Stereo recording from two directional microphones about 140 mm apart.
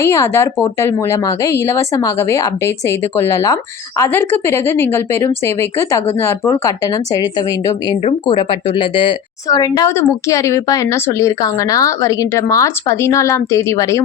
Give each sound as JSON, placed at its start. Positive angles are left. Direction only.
{"t": 0.0, "sound": "speech", "side_deg": 20}
{"t": 9.5, "sound": "speech", "side_deg": 25}